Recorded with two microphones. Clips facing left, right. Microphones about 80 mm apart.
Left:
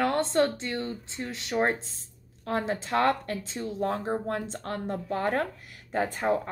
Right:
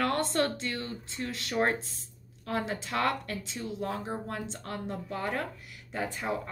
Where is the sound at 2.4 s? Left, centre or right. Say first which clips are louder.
Left 4 dB; left.